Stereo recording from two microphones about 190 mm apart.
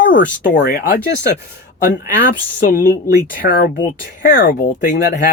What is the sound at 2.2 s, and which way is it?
Speech, 45° left (ahead or behind).